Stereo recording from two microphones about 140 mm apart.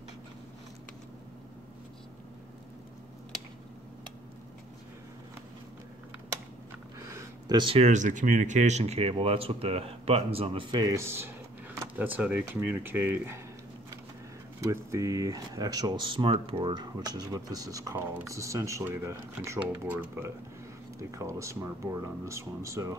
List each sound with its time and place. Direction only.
7.0 s a sound: 20° right (ahead or behind)
7.5 s speech: 35° right (ahead or behind)
7.8 s speech: 60° right (ahead or behind); by 13.4 s 15° right (ahead or behind)
14.6 s speech: 20° right (ahead or behind)